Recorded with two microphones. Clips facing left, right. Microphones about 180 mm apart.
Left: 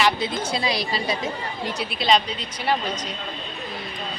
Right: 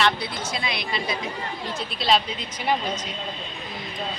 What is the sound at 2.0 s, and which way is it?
Speech, 5° right (ahead or behind).